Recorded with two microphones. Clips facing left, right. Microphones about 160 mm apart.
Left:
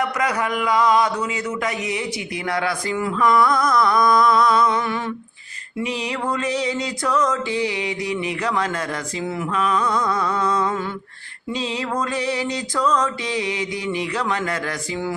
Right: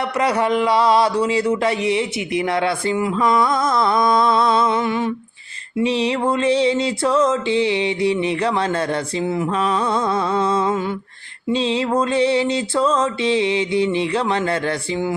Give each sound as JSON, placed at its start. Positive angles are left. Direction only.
{"t": 0.0, "sound": "speech", "side_deg": -30}
{"t": 5.8, "sound": "speech", "side_deg": -30}